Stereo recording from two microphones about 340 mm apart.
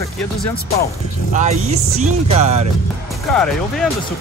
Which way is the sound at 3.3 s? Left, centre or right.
Centre.